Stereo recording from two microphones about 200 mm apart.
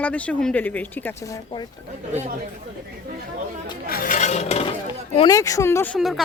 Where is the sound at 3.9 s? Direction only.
45° left (ahead or behind).